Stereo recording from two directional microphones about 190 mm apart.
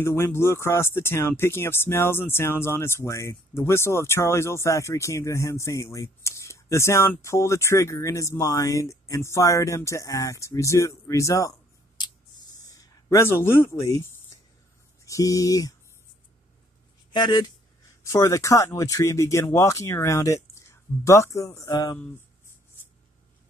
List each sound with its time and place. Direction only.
0.0 s speech: 15° left (ahead or behind)
12.6 s speech: 15° left (ahead or behind)
15.0 s speech: 15° left (ahead or behind)
17.1 s speech: 25° left (ahead or behind)